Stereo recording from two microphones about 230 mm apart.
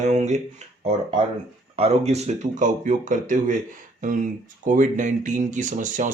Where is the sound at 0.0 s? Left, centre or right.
Right.